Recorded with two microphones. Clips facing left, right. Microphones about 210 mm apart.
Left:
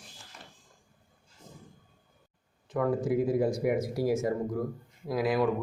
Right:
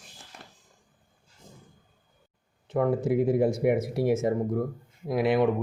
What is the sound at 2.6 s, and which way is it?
Speech, 25° right (ahead or behind).